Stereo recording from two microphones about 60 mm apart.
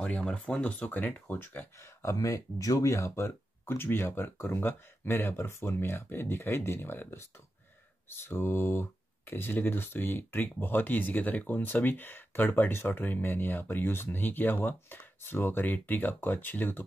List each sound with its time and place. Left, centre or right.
0.2 s speech: centre
1.8 s speech: left